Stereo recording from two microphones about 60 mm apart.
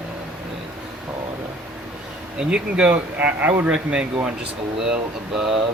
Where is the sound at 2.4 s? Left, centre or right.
Centre.